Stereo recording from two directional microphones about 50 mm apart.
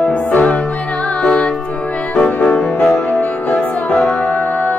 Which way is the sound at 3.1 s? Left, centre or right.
Left.